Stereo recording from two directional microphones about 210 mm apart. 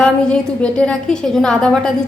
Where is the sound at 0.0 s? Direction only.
5° left (ahead or behind).